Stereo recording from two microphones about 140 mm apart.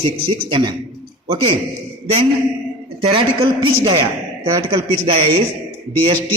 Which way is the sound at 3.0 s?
40° right (ahead or behind).